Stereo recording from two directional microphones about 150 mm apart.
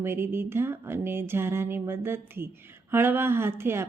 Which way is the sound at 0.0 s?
15° right (ahead or behind).